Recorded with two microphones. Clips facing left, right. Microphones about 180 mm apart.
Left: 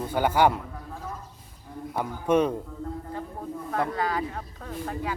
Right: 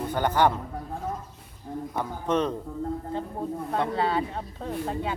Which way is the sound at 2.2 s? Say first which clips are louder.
Left 4 dB; 10° left (ahead or behind).